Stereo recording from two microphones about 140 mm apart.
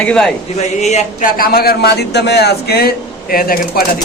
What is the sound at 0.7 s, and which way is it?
Speech, 55° left (ahead or behind).